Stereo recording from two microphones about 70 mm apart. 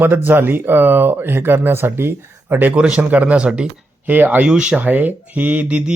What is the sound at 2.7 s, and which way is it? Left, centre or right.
Speech, centre.